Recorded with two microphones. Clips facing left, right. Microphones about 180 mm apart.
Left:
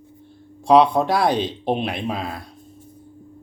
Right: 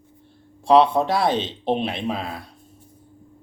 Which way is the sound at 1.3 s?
25° right (ahead or behind).